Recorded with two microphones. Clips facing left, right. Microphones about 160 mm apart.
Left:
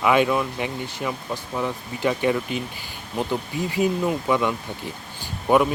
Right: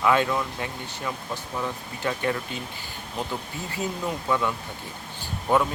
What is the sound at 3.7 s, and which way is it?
Speech, 15° left (ahead or behind).